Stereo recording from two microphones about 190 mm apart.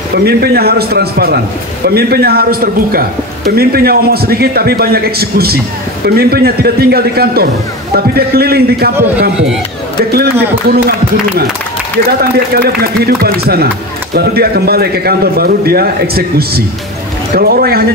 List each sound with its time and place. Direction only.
0.2 s a man's voice: 55° right (ahead or behind)
10.7 s a man's voice: 55° right (ahead or behind)